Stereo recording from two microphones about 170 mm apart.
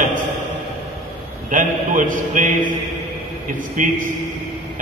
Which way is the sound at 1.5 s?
50° right (ahead or behind).